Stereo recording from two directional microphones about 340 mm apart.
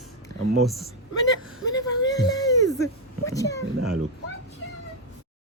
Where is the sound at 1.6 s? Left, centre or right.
Centre.